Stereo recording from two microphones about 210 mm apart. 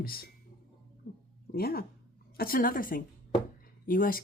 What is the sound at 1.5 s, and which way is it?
Speech, 45° left (ahead or behind).